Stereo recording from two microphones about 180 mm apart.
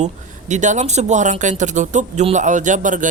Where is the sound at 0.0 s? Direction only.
40° right (ahead or behind).